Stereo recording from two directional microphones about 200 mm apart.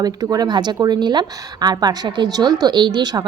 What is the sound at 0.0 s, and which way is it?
A woman's voice, 20° right (ahead or behind).